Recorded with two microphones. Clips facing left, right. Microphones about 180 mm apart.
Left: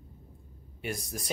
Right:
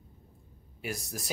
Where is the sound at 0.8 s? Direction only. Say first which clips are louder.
Left 1 dB; centre (ahead or behind).